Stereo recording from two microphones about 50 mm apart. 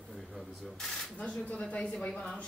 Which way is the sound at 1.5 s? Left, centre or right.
Left.